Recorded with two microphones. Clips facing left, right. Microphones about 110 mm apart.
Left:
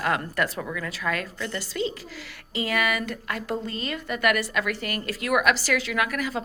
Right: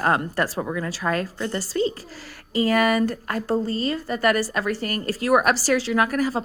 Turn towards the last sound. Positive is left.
turn(degrees=-35)  # may be behind; listen again after turning